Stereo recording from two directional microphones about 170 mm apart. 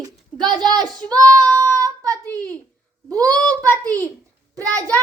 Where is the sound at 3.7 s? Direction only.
10° left (ahead or behind).